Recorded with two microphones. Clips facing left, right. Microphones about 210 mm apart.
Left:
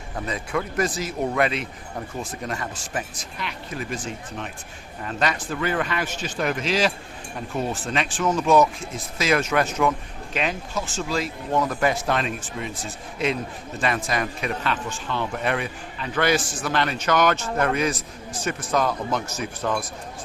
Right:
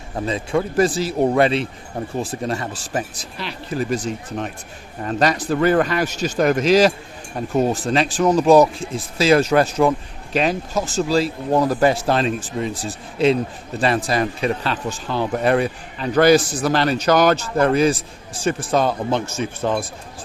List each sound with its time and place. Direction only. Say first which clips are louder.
0.2 s speech: right 6 dB; 30° right (ahead or behind)